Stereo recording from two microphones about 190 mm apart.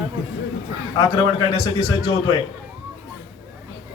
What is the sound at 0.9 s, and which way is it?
A man's voice, 20° left (ahead or behind).